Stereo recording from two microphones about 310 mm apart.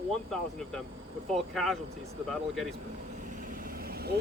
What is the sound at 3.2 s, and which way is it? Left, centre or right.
Vehicle, right.